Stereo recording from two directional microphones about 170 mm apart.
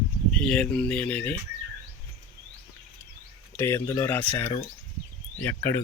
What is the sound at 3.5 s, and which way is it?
Speech, 15° left (ahead or behind).